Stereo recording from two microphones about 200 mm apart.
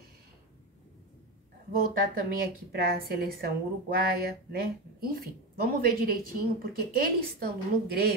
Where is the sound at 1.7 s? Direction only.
45° right (ahead or behind).